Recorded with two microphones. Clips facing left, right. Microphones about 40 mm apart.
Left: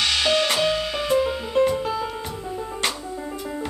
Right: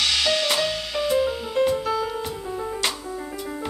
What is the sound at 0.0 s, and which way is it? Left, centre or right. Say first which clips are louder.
Music: left 2 dB; centre.